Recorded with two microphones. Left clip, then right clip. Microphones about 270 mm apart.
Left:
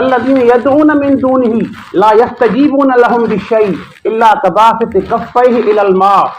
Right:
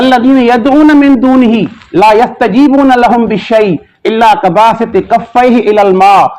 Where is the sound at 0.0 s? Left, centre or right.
Right.